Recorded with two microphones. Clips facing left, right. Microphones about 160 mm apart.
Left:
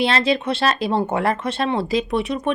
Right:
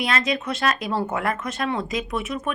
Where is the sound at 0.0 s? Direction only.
30° left (ahead or behind).